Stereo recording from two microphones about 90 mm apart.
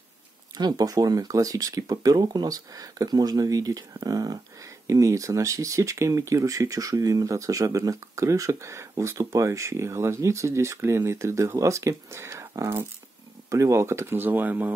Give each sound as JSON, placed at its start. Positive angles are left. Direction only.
{"t": 0.6, "sound": "speech", "side_deg": -50}